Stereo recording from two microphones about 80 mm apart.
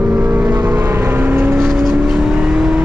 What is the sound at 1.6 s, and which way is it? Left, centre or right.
Vehicle, centre.